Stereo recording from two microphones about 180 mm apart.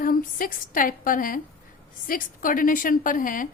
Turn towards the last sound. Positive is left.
turn(degrees=50)  # may be behind; listen again after turning